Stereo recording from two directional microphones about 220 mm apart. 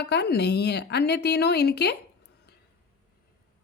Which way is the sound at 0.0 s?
50° left (ahead or behind).